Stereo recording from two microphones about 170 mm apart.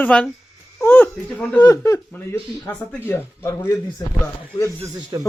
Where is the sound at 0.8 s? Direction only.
10° left (ahead or behind).